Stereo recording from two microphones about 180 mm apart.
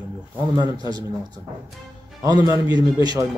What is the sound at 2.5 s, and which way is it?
Speech, 25° left (ahead or behind).